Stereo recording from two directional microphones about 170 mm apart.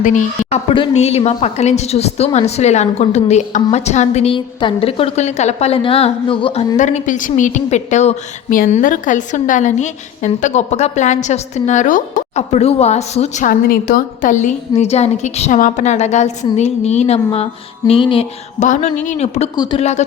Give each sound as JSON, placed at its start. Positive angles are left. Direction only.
{"t": 0.0, "sound": "a woman's voice", "side_deg": 45}
{"t": 0.7, "sound": "a woman's voice", "side_deg": 35}
{"t": 6.7, "sound": "a woman's voice", "side_deg": 45}
{"t": 18.6, "sound": "a woman's voice", "side_deg": 45}
{"t": 19.5, "sound": "speech", "side_deg": 25}
{"t": 19.8, "sound": "a woman's voice", "side_deg": 40}